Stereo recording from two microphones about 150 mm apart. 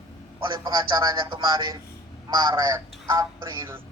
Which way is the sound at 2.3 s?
30° right (ahead or behind).